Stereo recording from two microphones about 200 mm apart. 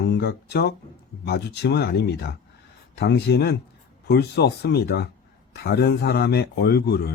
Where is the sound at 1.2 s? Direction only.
55° left (ahead or behind).